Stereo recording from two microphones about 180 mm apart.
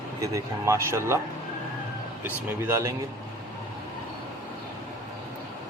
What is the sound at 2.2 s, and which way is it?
Speech, 15° right (ahead or behind).